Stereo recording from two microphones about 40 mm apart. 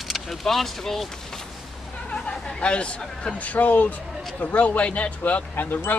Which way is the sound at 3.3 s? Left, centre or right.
Left.